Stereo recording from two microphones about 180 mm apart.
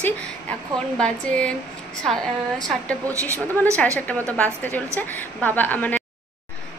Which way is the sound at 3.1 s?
15° right (ahead or behind).